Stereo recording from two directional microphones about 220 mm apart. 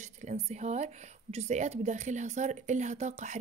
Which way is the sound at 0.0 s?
30° right (ahead or behind).